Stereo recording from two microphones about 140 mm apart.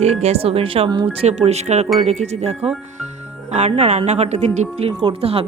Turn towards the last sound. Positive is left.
turn(degrees=-45)  # may be behind; listen again after turning